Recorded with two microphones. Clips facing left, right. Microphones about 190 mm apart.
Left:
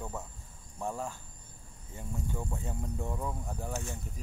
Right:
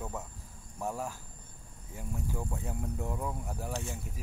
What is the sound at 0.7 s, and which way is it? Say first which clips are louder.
Speech: even; 5° right (ahead or behind).